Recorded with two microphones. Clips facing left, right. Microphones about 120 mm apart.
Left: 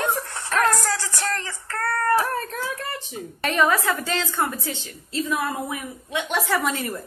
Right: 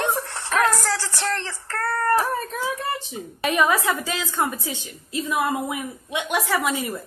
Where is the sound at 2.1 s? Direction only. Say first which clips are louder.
Even; 10° right (ahead or behind).